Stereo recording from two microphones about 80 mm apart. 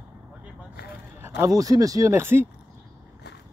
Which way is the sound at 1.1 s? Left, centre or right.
Right.